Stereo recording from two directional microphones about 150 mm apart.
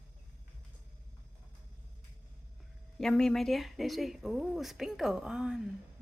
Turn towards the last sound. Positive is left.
turn(degrees=-5)  # may be behind; listen again after turning